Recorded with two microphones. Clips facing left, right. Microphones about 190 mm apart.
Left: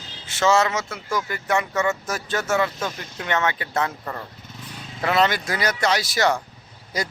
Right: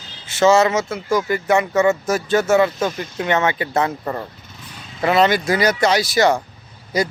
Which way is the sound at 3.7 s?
20° right (ahead or behind).